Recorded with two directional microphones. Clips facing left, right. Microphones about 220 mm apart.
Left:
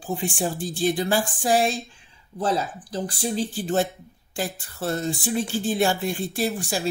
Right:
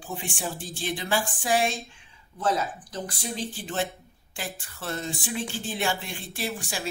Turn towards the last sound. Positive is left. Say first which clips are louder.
# left 7 dB
turn(degrees=40)  # may be behind; listen again after turning